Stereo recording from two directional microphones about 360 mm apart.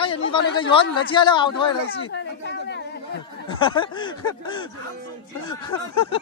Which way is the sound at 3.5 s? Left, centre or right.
Centre.